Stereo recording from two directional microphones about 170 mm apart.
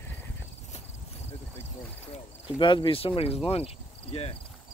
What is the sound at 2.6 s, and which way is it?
Speech, 30° left (ahead or behind).